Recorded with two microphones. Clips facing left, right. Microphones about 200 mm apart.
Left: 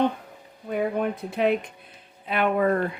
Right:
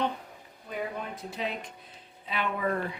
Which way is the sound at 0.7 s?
55° left (ahead or behind).